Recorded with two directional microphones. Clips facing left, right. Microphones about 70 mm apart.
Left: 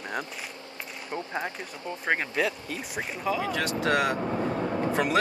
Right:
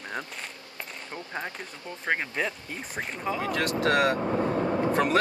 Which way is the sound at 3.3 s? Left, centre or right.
Right.